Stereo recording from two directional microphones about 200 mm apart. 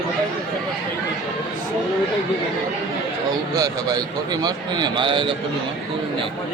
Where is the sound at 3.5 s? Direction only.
20° right (ahead or behind).